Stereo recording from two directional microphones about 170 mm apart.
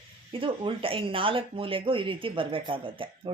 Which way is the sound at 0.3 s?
30° right (ahead or behind).